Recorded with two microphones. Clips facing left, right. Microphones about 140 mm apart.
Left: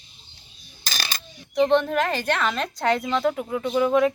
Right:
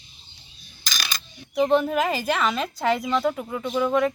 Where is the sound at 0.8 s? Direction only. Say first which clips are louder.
Even; 35° left (ahead or behind).